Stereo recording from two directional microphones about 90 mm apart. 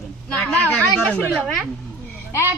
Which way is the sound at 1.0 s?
15° left (ahead or behind).